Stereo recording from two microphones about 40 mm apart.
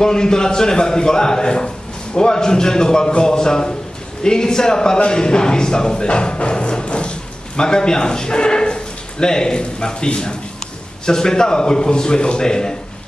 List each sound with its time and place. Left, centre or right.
0.0 s a man's voice: centre